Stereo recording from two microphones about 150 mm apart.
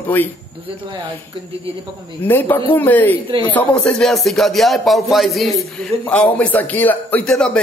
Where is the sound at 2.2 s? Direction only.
10° left (ahead or behind).